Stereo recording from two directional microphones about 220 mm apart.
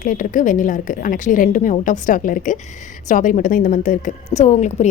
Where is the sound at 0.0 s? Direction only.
35° left (ahead or behind).